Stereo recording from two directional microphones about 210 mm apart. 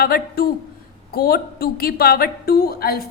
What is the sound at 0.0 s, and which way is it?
A woman's voice, 45° left (ahead or behind).